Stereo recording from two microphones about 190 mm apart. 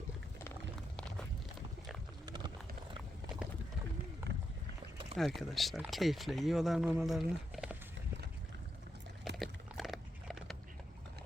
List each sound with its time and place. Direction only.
2.2 s a sound: 25° right (ahead or behind)
5.1 s speech: centre (ahead or behind)
9.3 s dog: centre (ahead or behind)